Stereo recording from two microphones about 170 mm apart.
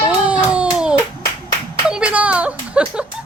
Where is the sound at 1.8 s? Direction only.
5° right (ahead or behind).